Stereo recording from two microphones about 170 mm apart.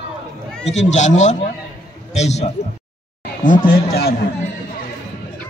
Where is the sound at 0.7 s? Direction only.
40° left (ahead or behind).